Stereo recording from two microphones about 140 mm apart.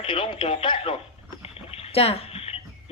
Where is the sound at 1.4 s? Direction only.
45° left (ahead or behind).